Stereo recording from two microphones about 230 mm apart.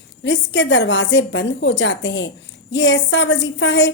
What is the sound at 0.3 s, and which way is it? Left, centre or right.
A woman's voice, left.